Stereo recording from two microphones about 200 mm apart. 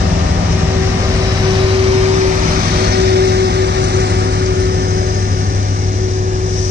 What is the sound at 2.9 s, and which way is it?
Vehicle, 55° right (ahead or behind).